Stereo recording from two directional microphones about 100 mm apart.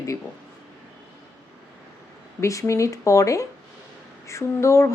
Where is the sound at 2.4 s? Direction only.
30° left (ahead or behind).